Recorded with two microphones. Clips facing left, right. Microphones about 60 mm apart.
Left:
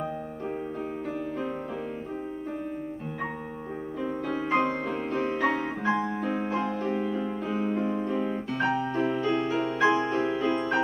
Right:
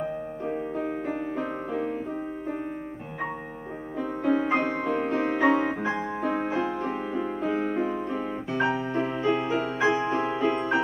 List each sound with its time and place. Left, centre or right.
4.0 s music: centre
4.6 s music: right
5.4 s music: centre
6.9 s music: right
10.1 s music: right
10.5 s music: centre